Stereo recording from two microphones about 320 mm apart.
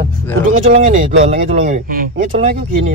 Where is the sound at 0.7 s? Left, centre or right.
Right.